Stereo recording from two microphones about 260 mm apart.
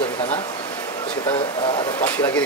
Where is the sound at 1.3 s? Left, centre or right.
Left.